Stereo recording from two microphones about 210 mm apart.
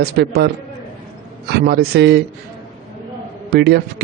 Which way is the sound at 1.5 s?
50° right (ahead or behind).